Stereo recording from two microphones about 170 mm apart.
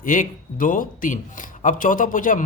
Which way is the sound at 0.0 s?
50° left (ahead or behind).